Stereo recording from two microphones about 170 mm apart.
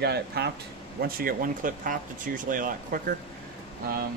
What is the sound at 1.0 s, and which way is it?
Speech, 60° right (ahead or behind).